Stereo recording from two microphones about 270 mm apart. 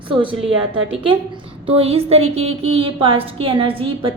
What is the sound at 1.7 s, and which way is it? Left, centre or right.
A woman's voice, right.